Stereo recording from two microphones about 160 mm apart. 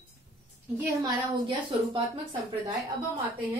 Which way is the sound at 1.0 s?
30° right (ahead or behind).